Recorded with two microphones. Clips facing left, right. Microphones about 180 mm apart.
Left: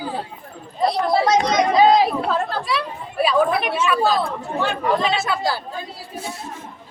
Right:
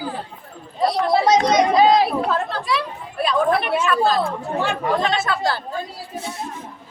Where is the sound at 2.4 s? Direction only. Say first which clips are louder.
Even; centre (ahead or behind).